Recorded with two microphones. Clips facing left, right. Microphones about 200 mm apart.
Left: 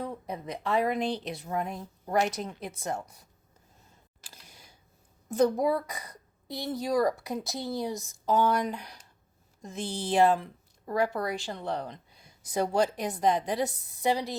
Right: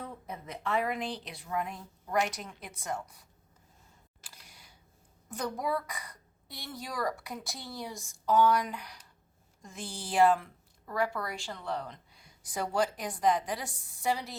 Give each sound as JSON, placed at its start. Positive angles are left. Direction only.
{"t": 0.0, "sound": "a sound", "side_deg": 35}
{"t": 0.6, "sound": "a woman's voice", "side_deg": 35}
{"t": 1.0, "sound": "a woman's voice", "side_deg": 25}
{"t": 1.4, "sound": "a woman's voice", "side_deg": 40}
{"t": 5.3, "sound": "a woman's voice", "side_deg": 25}
{"t": 10.3, "sound": "a sound", "side_deg": 35}
{"t": 11.3, "sound": "a woman's voice", "side_deg": 40}
{"t": 12.2, "sound": "a woman's voice", "side_deg": 25}